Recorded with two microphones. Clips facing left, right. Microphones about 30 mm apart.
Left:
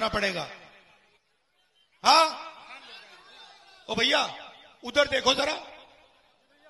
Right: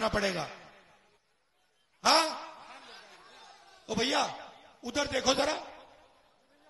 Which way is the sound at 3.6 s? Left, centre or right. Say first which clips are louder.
Left 5 dB; left.